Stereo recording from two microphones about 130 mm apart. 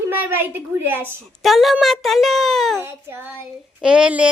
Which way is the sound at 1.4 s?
Centre (ahead or behind).